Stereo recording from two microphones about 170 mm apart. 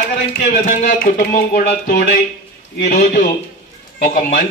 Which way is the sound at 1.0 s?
55° left (ahead or behind).